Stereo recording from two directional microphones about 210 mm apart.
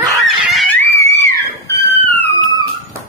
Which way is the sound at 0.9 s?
15° left (ahead or behind).